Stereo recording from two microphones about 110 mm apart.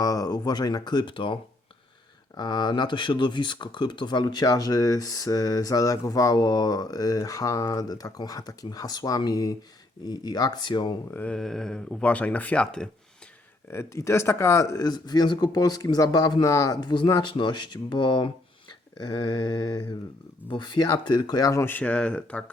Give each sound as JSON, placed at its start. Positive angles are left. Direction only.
{"t": 0.0, "sound": "speech", "side_deg": 35}
{"t": 11.1, "sound": "speech", "side_deg": 10}
{"t": 13.7, "sound": "speech", "side_deg": 25}